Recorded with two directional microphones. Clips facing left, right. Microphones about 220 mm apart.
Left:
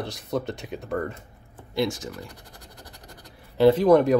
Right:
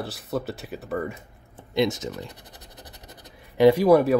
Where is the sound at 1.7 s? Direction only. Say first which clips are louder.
Right 3 dB; 20° right (ahead or behind).